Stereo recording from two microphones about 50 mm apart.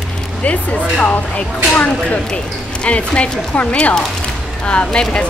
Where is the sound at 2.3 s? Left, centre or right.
Left.